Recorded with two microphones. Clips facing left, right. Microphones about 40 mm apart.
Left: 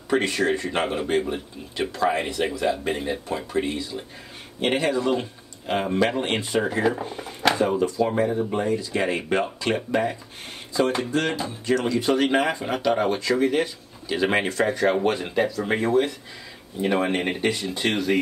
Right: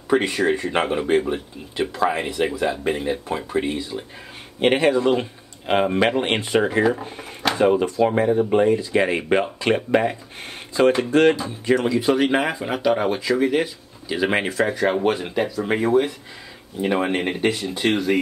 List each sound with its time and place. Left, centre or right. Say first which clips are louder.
0.1 s speech: right 3 dB; centre
3.3 s speech: right 2 dB; centre; by 11.3 s right
11.6 s speech: right 4 dB; centre